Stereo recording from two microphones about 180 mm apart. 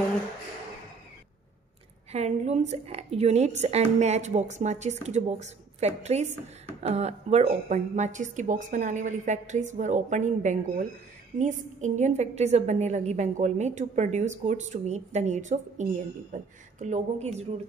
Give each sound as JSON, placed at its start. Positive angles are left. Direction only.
{"t": 2.1, "sound": "a woman's voice", "side_deg": -40}